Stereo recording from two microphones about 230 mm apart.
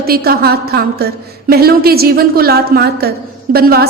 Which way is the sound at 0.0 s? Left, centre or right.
Right.